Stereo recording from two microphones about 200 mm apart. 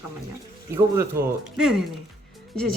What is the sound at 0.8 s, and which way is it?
Speech, 15° right (ahead or behind).